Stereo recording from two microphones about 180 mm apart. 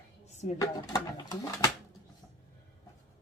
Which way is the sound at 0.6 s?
20° left (ahead or behind).